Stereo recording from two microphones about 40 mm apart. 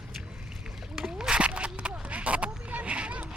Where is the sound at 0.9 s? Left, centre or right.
Centre.